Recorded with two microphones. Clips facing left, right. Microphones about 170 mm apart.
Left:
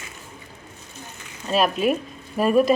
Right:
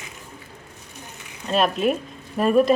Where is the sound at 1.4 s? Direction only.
Centre (ahead or behind).